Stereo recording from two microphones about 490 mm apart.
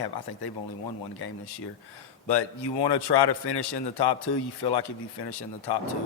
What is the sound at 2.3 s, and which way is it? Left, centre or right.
Speech, left.